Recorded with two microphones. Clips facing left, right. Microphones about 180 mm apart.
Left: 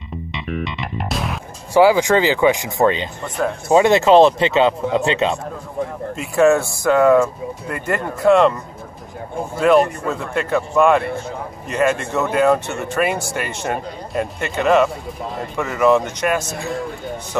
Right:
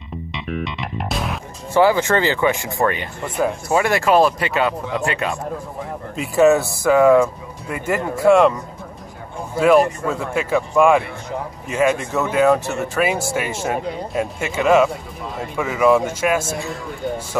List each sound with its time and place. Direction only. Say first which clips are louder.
0.3 s music: left 1 dB; centre (ahead or behind)
1.7 s speech: left 3 dB; 10° left (ahead or behind)
6.1 s speech: even; centre (ahead or behind)
9.6 s speech: even; 5° right (ahead or behind)